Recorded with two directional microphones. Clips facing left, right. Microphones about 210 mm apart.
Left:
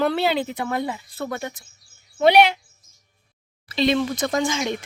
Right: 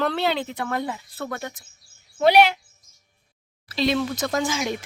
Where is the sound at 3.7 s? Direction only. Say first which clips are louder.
Left 2 dB; centre (ahead or behind).